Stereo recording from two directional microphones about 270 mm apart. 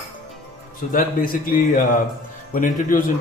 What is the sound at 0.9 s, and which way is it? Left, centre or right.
Speech, left.